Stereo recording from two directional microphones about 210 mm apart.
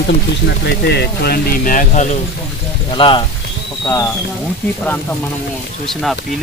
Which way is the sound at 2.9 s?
25° left (ahead or behind).